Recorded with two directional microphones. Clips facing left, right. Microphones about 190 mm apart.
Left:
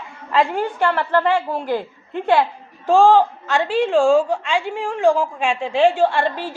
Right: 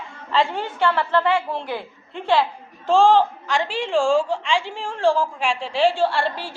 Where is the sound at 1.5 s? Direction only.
15° left (ahead or behind).